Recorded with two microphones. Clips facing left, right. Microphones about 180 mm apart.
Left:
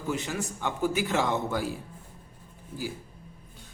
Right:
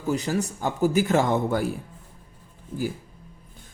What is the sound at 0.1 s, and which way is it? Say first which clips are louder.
A man's voice: right 6 dB; 40° right (ahead or behind).